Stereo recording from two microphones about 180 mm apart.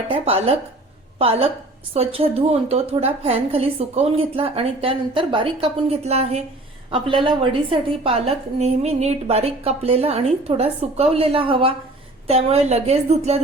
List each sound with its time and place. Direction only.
0.1 s a woman's voice: 35° right (ahead or behind)